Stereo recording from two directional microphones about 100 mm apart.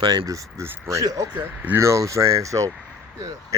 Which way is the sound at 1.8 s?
30° right (ahead or behind).